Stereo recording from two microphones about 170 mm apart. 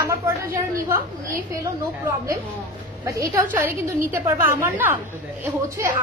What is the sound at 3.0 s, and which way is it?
A woman's voice, 20° right (ahead or behind).